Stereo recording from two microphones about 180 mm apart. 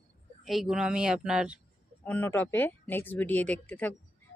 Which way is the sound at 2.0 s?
10° left (ahead or behind).